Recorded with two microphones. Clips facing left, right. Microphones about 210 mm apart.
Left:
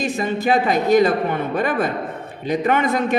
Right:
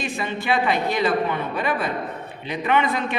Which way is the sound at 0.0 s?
40° left (ahead or behind).